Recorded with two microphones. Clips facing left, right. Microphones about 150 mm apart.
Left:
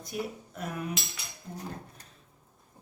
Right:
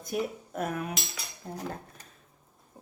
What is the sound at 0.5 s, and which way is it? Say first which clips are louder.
Cutlery: right 4 dB; 50° right (ahead or behind).